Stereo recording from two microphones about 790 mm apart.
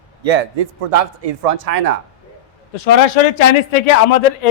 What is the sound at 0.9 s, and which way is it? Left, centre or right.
Speech, right.